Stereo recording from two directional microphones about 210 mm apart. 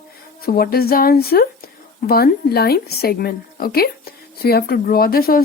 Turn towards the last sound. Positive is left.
turn(degrees=45)  # may be behind; listen again after turning